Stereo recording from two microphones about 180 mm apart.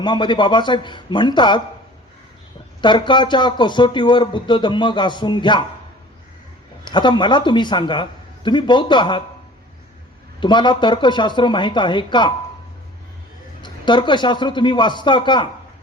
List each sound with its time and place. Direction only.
0.0 s speech: 25° left (ahead or behind)
2.8 s speech: 25° left (ahead or behind)
6.8 s speech: 25° left (ahead or behind)
10.4 s speech: 25° left (ahead or behind)
13.6 s speech: 25° left (ahead or behind)